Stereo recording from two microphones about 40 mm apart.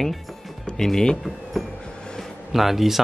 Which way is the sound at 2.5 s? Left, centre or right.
Centre.